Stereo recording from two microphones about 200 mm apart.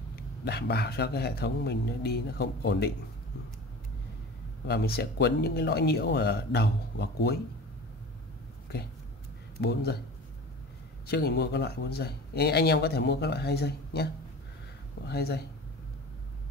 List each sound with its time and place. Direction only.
0.1 s speech: 55° left (ahead or behind)
4.6 s speech: 55° left (ahead or behind)
9.6 s speech: 55° left (ahead or behind)
11.1 s speech: 55° left (ahead or behind)